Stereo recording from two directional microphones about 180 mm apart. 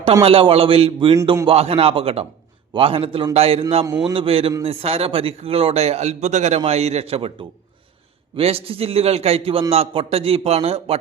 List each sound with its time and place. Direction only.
0.0 s a man's voice: 35° right (ahead or behind)
8.4 s a man's voice: 35° right (ahead or behind)